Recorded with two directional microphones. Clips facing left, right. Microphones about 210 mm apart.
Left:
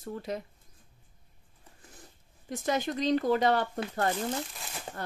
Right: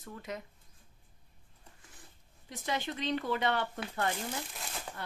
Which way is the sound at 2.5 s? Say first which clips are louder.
Left 6 dB; 45° left (ahead or behind).